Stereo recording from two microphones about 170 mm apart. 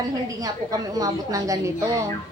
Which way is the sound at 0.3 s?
20° right (ahead or behind).